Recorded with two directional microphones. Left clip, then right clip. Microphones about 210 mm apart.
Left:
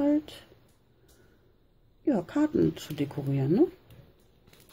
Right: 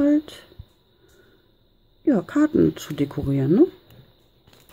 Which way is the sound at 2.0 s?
20° right (ahead or behind).